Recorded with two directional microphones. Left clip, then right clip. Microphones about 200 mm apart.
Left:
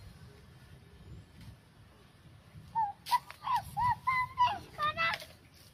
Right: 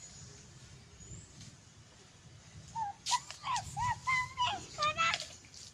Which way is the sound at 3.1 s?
15° left (ahead or behind).